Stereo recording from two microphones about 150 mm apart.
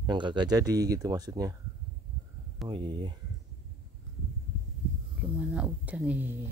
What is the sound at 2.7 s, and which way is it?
Speech, 30° right (ahead or behind).